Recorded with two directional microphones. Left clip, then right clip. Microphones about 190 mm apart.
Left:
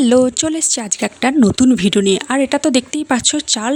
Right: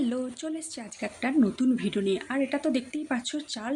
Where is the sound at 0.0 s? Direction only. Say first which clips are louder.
Left 19 dB; 60° left (ahead or behind).